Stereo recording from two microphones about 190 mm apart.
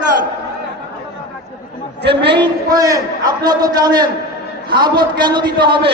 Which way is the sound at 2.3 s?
20° right (ahead or behind).